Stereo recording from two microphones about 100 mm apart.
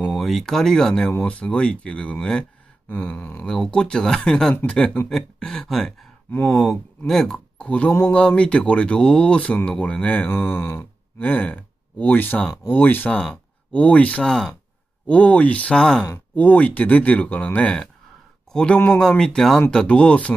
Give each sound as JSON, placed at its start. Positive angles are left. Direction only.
{"t": 0.1, "sound": "speech", "side_deg": 0}
{"t": 6.3, "sound": "speech", "side_deg": 20}
{"t": 7.1, "sound": "a man's voice", "side_deg": 5}